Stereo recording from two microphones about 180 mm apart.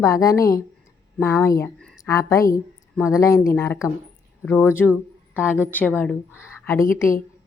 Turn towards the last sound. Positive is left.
turn(degrees=15)  # may be behind; listen again after turning